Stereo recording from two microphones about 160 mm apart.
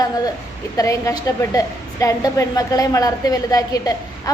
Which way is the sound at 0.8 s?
20° left (ahead or behind).